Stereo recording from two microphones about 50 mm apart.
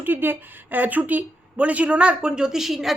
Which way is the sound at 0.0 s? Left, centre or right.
Right.